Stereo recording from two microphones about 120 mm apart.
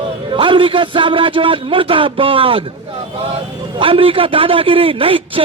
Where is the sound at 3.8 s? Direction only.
50° right (ahead or behind).